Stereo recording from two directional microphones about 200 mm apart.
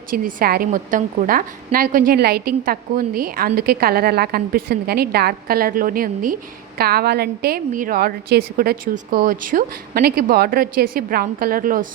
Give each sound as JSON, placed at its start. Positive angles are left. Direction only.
{"t": 0.1, "sound": "a woman's voice", "side_deg": -45}